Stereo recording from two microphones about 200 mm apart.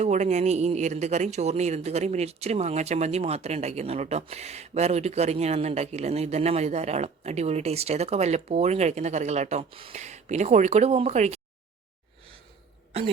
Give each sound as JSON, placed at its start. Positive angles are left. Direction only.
{"t": 0.0, "sound": "speech", "side_deg": -35}